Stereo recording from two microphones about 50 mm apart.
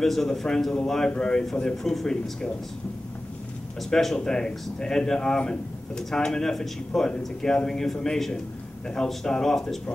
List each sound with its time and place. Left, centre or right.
0.0 s speech: centre
3.9 s speech: centre